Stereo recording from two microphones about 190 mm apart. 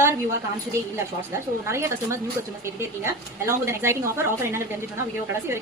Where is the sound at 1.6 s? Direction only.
15° right (ahead or behind).